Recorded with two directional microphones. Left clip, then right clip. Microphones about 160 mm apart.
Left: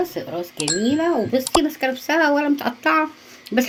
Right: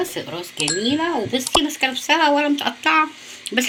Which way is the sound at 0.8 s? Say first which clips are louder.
Left 3 dB; 65° left (ahead or behind).